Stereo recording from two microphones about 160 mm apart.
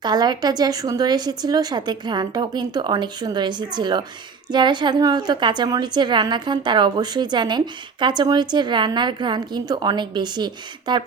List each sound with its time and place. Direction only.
0.0 s a woman's voice: 25° right (ahead or behind)